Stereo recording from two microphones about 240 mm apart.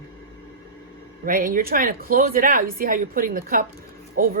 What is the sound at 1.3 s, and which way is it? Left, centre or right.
Speech, right.